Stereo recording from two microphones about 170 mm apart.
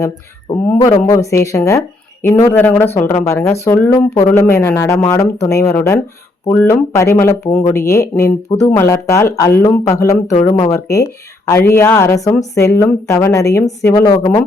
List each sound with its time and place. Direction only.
0.8 s speech: 20° left (ahead or behind)